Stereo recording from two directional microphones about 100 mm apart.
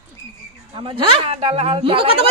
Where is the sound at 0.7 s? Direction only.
55° right (ahead or behind).